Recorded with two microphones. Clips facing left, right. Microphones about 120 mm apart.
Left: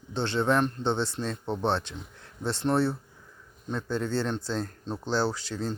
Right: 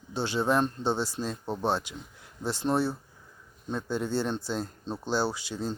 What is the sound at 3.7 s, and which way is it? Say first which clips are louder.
Speech: even; 10° right (ahead or behind).